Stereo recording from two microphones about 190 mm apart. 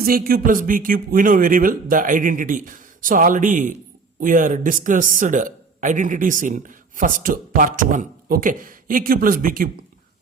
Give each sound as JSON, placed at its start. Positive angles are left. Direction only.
{"t": 0.0, "sound": "speech", "side_deg": -50}